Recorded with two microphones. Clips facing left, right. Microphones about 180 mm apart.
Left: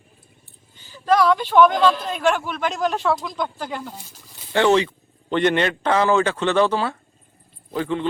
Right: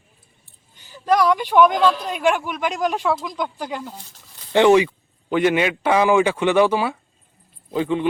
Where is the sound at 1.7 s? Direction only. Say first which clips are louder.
Even; centre (ahead or behind).